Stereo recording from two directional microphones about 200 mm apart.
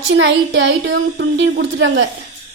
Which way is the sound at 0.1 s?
65° right (ahead or behind).